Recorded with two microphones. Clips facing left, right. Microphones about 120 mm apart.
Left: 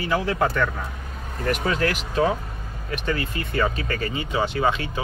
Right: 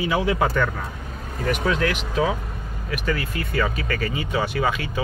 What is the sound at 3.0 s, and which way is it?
Speech, 25° left (ahead or behind).